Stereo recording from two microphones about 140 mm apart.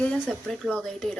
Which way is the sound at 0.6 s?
5° left (ahead or behind).